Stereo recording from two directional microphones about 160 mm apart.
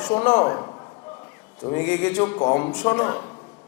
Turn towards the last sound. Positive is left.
turn(degrees=15)  # may be behind; listen again after turning